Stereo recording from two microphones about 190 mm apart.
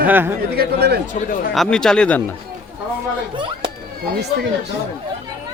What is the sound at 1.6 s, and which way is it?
Speech, 5° left (ahead or behind).